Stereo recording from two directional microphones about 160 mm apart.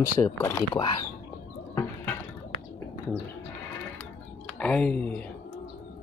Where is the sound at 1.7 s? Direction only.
20° left (ahead or behind).